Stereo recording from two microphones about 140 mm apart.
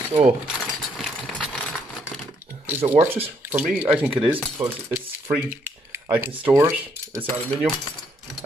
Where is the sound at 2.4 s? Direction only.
15° right (ahead or behind).